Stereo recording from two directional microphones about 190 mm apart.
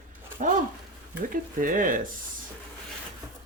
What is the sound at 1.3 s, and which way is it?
Speech, 45° right (ahead or behind).